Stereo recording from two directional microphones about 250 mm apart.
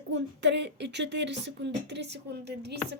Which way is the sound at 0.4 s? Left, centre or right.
Right.